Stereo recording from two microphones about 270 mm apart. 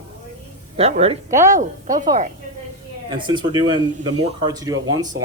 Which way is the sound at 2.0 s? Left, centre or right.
Right.